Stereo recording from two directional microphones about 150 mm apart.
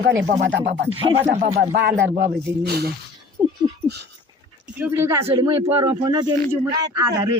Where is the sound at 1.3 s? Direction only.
55° right (ahead or behind).